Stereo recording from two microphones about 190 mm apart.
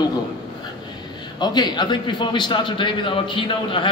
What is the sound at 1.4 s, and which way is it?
A man's voice, 20° left (ahead or behind).